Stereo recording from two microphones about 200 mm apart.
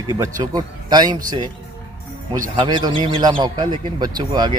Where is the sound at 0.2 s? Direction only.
20° right (ahead or behind).